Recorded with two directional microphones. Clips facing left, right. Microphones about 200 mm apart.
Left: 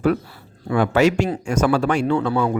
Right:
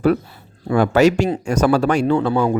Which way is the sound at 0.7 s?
40° right (ahead or behind).